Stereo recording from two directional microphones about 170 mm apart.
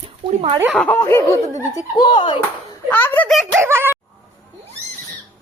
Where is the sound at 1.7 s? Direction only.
25° left (ahead or behind).